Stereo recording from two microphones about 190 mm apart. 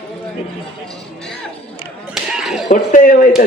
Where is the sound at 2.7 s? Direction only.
40° left (ahead or behind).